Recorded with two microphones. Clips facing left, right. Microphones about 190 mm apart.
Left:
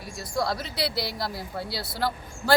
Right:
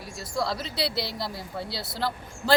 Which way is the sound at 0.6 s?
25° right (ahead or behind).